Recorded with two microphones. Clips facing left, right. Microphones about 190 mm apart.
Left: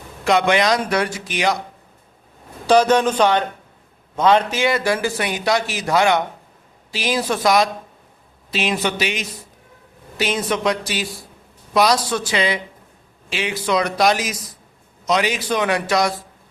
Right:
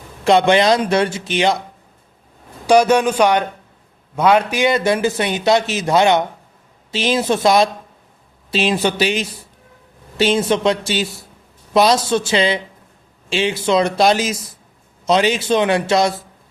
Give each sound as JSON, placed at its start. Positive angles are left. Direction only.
{"t": 0.3, "sound": "a man's voice", "side_deg": -30}
{"t": 2.6, "sound": "a man's voice", "side_deg": -10}